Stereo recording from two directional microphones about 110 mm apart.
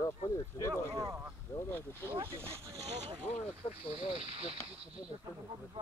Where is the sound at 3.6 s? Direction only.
70° left (ahead or behind).